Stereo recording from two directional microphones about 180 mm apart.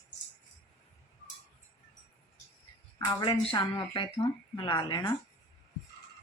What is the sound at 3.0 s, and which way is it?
A woman's voice, 25° left (ahead or behind).